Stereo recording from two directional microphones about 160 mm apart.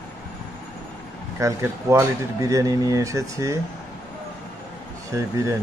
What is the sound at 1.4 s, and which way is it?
Speech, 20° right (ahead or behind).